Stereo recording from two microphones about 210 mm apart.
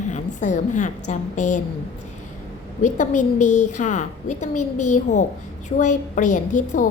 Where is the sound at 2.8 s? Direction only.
35° left (ahead or behind).